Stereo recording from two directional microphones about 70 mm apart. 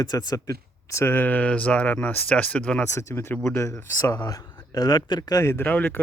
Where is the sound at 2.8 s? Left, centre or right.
Left.